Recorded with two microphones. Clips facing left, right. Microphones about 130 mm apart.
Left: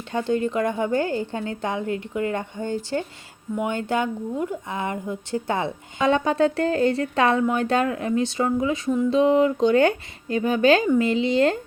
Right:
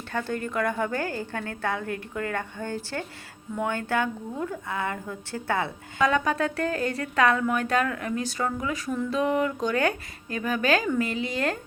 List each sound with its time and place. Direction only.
0.1 s speech: 20° left (ahead or behind)